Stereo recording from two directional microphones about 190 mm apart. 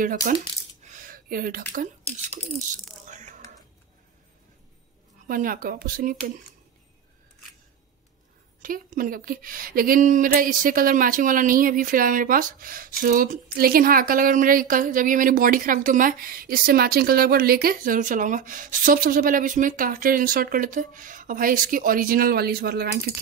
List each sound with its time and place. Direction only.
0.0 s speech: 45° right (ahead or behind)
1.1 s a sound: 50° right (ahead or behind)
2.1 s speech: 40° right (ahead or behind)
3.1 s whispering: 40° right (ahead or behind)
5.3 s speech: 50° right (ahead or behind)
8.6 s speech: 45° right (ahead or behind)